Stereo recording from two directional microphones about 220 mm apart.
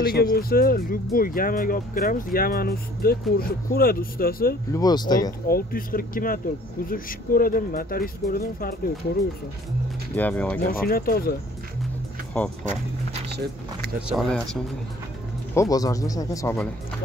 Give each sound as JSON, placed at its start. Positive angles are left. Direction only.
{"t": 0.0, "sound": "speech", "side_deg": 40}
{"t": 4.7, "sound": "speech", "side_deg": 20}
{"t": 5.5, "sound": "speech", "side_deg": 40}
{"t": 10.1, "sound": "speech", "side_deg": 5}
{"t": 10.7, "sound": "speech", "side_deg": 40}
{"t": 14.0, "sound": "speech", "side_deg": 0}
{"t": 15.5, "sound": "speech", "side_deg": 15}